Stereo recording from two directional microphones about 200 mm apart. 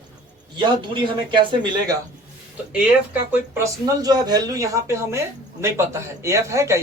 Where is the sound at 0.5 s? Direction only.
25° right (ahead or behind).